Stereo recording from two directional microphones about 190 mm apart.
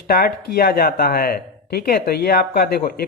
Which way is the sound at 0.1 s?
50° left (ahead or behind).